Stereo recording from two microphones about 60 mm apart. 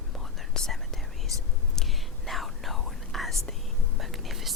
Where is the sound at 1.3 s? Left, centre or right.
Right.